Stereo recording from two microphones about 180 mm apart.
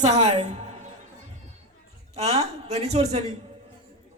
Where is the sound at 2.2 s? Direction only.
35° right (ahead or behind).